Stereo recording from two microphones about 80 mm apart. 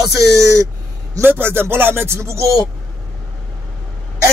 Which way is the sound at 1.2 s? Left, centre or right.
Right.